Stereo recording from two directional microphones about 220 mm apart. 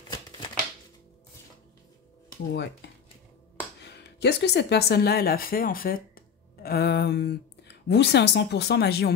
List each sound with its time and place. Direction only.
2.5 s speech: 50° left (ahead or behind)